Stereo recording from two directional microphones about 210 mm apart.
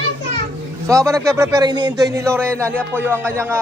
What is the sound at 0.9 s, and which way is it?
Speech, 15° right (ahead or behind).